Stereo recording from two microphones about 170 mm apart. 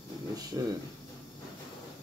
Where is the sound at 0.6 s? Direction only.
20° right (ahead or behind).